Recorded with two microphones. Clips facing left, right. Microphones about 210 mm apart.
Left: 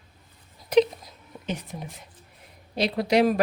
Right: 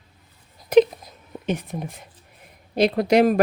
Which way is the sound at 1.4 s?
55° right (ahead or behind).